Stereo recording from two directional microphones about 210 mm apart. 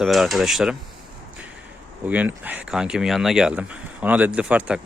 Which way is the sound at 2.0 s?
5° right (ahead or behind).